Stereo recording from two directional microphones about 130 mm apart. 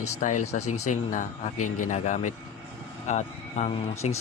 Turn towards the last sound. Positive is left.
turn(degrees=60)  # may be behind; listen again after turning